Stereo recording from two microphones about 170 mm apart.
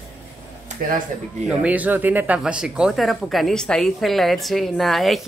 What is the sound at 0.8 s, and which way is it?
Speech, 55° right (ahead or behind).